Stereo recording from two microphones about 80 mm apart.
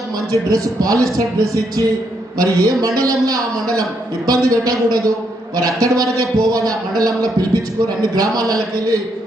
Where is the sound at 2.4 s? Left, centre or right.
Right.